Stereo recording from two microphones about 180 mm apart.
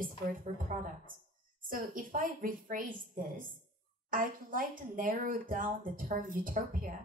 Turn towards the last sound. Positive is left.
turn(degrees=-50)  # may be behind; listen again after turning